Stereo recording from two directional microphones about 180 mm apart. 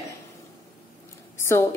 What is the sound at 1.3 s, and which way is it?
Speech, 15° left (ahead or behind).